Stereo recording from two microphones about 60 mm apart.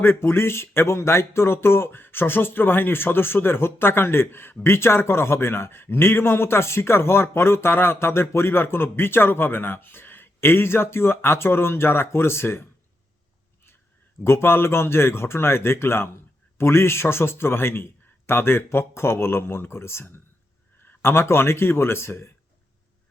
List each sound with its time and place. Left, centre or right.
0.0 s a man's voice: left
14.3 s a man's voice: left